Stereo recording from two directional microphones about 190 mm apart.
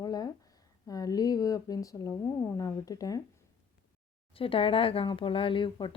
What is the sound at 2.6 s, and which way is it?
Speech, 20° left (ahead or behind).